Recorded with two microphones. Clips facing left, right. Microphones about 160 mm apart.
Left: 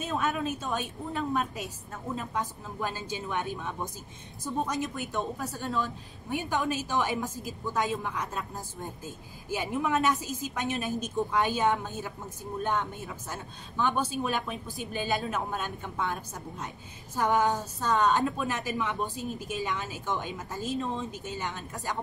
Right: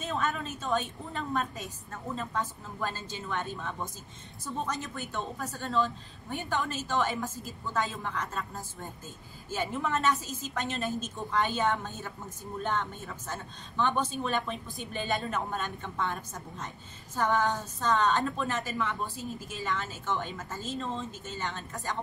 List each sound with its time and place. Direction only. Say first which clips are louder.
0.0 s a woman's voice: left 2 dB; 15° left (ahead or behind)